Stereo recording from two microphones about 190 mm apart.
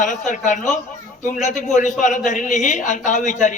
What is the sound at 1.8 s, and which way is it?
A man's voice, 40° left (ahead or behind).